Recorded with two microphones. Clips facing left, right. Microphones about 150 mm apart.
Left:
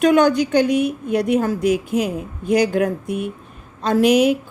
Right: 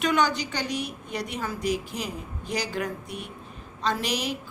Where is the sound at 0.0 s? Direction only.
50° left (ahead or behind).